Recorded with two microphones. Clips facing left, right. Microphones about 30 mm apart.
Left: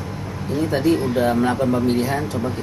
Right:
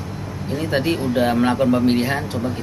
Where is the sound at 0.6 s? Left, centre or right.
Right.